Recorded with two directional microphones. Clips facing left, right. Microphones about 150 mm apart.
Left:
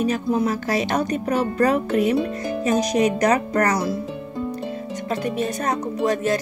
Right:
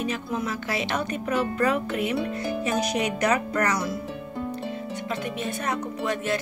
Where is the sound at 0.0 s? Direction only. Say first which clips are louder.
Left 8 dB; 40° left (ahead or behind).